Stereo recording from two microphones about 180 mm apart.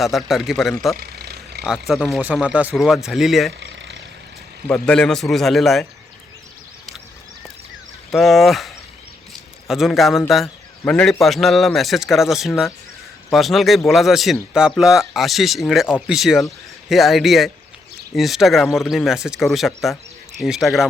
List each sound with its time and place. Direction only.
0.0 s a man's voice: centre (ahead or behind)
0.9 s vehicle: 60° right (ahead or behind)
1.9 s a man's voice: centre (ahead or behind)
3.6 s vehicle: 80° right
4.7 s a man's voice: 5° left (ahead or behind)
8.1 s a man's voice: centre (ahead or behind)